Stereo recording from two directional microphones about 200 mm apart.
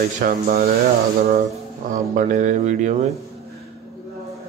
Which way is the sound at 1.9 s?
40° right (ahead or behind).